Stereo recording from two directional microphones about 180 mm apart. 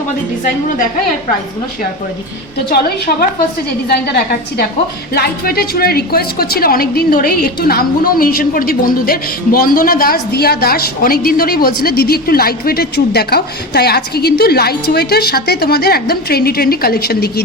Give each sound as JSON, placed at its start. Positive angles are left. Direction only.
{"t": 4.0, "sound": "a woman's voice", "side_deg": 60}